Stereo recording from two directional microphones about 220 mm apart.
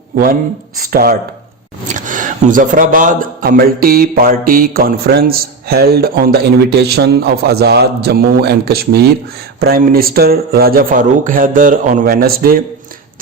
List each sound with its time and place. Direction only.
0.8 s speech: 40° right (ahead or behind)